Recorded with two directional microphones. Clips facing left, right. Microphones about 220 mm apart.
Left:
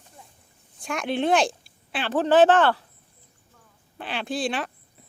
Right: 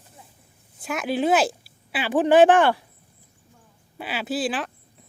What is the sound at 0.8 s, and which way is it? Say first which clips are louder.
Speech: right 1 dB; 5° right (ahead or behind).